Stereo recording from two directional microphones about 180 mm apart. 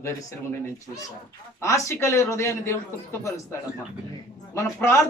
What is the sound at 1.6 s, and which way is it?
A man's voice, 15° left (ahead or behind).